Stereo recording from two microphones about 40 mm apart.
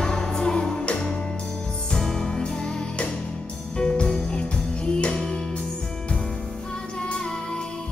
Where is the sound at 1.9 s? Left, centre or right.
Centre.